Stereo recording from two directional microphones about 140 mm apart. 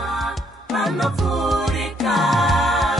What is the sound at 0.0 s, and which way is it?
Music, centre (ahead or behind).